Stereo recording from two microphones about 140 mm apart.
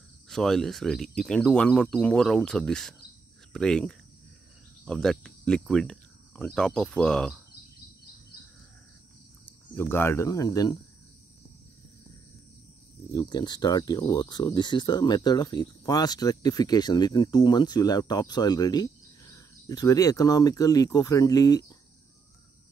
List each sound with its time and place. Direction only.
0.3 s speech: 5° left (ahead or behind)
9.5 s speech: 15° left (ahead or behind)
13.1 s speech: 30° left (ahead or behind)